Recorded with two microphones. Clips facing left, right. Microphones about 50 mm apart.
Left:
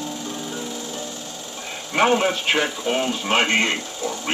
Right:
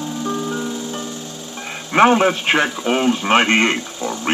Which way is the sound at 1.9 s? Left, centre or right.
Right.